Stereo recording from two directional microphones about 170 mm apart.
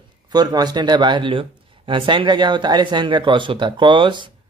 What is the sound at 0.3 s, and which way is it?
Speech, 25° right (ahead or behind).